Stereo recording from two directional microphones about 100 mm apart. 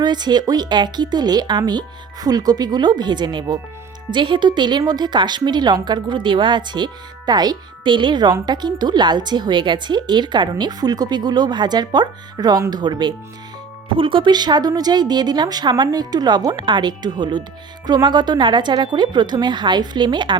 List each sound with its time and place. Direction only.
0.0 s a woman's voice: 45° right (ahead or behind)
13.9 s a woman's voice: 60° right (ahead or behind)